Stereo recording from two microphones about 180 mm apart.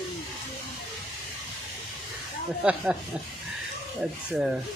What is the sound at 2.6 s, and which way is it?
Speech, 5° right (ahead or behind).